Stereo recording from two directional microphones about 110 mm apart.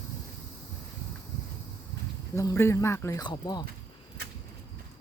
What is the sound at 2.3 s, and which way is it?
Speech, 30° left (ahead or behind).